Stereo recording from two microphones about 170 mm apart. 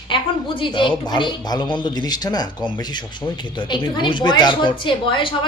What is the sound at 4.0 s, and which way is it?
A man's voice, 25° left (ahead or behind).